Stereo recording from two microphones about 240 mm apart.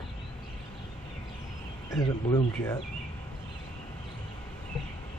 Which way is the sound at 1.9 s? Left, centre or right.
Centre.